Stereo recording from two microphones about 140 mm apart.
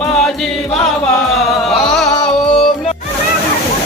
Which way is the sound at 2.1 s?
40° left (ahead or behind).